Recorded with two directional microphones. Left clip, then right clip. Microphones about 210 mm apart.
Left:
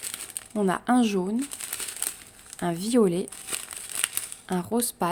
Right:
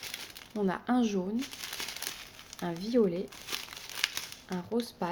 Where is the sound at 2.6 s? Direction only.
35° left (ahead or behind).